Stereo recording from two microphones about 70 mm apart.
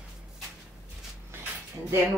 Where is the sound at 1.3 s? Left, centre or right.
Right.